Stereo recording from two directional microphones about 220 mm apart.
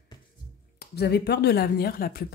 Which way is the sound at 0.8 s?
50° left (ahead or behind).